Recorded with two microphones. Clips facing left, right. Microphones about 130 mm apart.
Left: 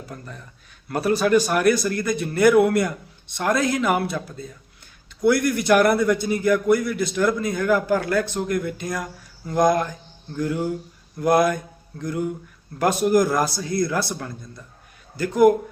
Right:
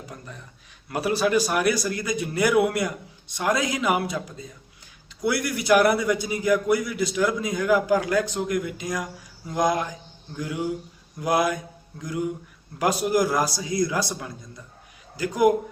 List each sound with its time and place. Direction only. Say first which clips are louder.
0.0 s a man's voice: left 3 dB; 15° right (ahead or behind)
9.5 s mantra: left 4 dB; 10° right (ahead or behind)
12.8 s a man's voice: left 3 dB; 10° right (ahead or behind)